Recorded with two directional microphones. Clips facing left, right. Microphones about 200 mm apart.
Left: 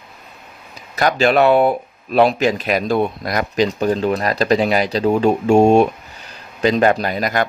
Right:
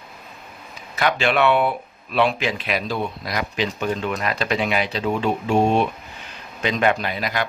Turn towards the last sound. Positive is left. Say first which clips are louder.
# left 6 dB
turn(degrees=45)  # may be behind; listen again after turning